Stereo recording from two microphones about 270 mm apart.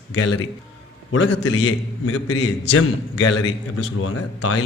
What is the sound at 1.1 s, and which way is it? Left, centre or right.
A man's voice, left.